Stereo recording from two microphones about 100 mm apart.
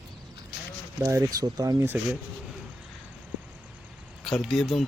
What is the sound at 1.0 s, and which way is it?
Speech, 30° right (ahead or behind).